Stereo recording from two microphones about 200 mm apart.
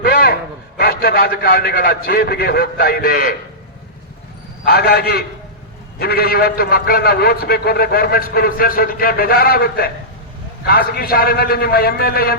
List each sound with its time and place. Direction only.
0.0 s a sound: 50° left (ahead or behind)
0.8 s a man's voice: 50° left (ahead or behind)
4.6 s a man's voice: 50° left (ahead or behind)